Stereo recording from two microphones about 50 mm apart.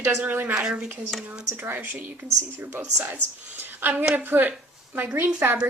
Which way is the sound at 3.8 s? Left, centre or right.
Right.